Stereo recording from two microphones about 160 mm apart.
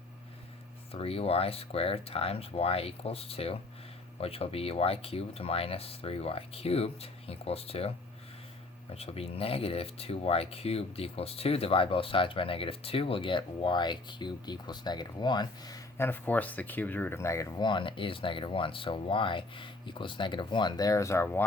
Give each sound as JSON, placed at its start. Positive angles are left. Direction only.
{"t": 0.9, "sound": "speech", "side_deg": 35}
{"t": 9.0, "sound": "speech", "side_deg": 40}
{"t": 16.0, "sound": "speech", "side_deg": 10}